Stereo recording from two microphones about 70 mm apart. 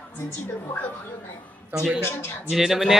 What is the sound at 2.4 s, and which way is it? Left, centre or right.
Speech, centre.